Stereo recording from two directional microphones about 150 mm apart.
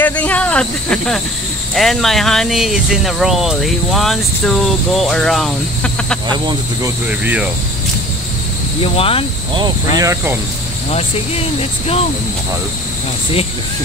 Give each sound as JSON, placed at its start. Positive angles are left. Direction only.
{"t": 0.0, "sound": "speech", "side_deg": 10}
{"t": 6.3, "sound": "speech", "side_deg": -30}
{"t": 7.1, "sound": "speech", "side_deg": -10}
{"t": 8.8, "sound": "speech", "side_deg": 40}
{"t": 9.9, "sound": "speech", "side_deg": -20}
{"t": 10.9, "sound": "speech", "side_deg": 40}